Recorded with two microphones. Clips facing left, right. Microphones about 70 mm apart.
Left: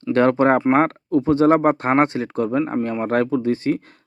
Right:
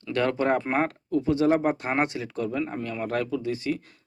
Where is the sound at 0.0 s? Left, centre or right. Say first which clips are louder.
Left 9 dB; left.